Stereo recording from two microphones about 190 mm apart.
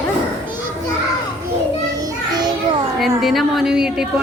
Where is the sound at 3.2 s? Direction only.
Centre (ahead or behind).